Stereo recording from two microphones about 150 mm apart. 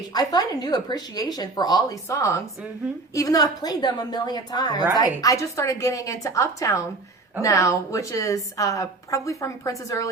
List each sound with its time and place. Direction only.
0.1 s a woman's voice: 25° left (ahead or behind)